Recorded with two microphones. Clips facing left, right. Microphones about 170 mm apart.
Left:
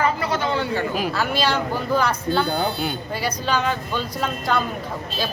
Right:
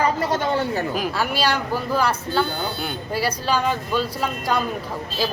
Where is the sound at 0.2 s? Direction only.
45° right (ahead or behind).